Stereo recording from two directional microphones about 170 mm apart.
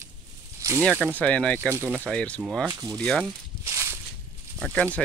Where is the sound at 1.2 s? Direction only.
5° left (ahead or behind).